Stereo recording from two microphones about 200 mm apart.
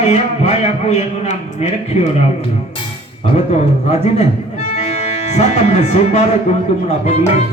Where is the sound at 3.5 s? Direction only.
35° left (ahead or behind).